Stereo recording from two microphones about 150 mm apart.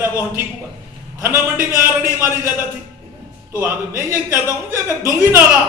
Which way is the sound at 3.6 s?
15° right (ahead or behind).